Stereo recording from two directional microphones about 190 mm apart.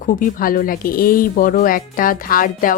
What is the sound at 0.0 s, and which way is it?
Speech, 45° left (ahead or behind).